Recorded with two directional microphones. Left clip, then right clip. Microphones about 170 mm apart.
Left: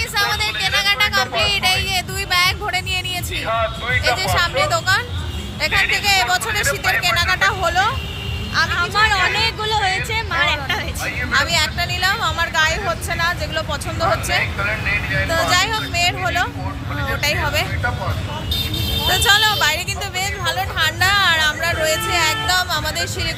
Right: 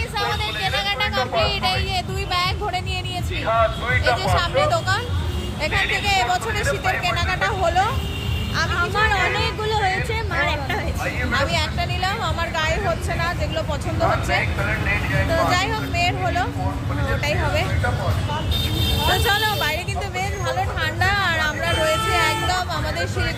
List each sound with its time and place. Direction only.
0.2 s music: centre (ahead or behind)
3.4 s music: 25° left (ahead or behind)
4.6 s vehicle: 15° left (ahead or behind)
5.6 s speech: 10° left (ahead or behind)
8.7 s speech: 20° right (ahead or behind)
11.3 s speech: centre (ahead or behind)
19.0 s speech: centre (ahead or behind)